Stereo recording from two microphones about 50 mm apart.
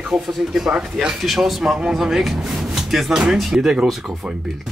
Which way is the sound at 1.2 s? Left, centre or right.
Centre.